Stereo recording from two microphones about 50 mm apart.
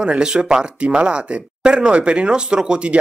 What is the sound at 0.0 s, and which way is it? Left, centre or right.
Speech, centre.